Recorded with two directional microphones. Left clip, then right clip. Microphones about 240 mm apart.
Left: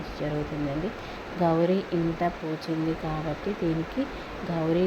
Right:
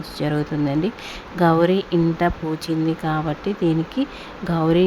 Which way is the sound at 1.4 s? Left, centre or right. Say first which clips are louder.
Right 7 dB; right.